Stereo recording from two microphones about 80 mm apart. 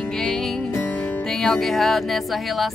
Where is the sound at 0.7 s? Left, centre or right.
Left.